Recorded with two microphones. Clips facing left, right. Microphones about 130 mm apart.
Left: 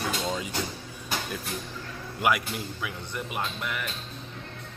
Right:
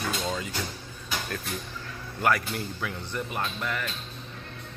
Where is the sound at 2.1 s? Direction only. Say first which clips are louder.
Even; 10° left (ahead or behind).